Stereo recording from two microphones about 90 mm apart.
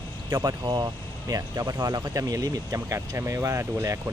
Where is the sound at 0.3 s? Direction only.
45° right (ahead or behind).